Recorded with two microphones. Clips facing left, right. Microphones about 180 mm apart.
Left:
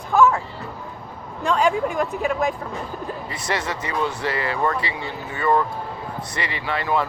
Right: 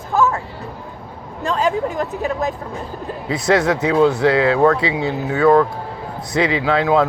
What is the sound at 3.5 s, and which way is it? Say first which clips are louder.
Speech: right 11 dB; 90° right.